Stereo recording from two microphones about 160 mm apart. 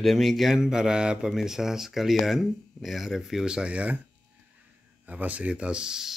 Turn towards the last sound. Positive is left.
turn(degrees=-5)  # may be behind; listen again after turning